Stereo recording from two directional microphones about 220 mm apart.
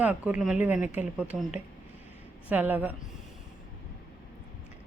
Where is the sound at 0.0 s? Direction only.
5° right (ahead or behind).